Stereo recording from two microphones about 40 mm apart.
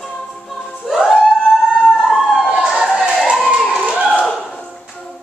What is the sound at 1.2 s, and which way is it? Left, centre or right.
Emergency vehicle, centre.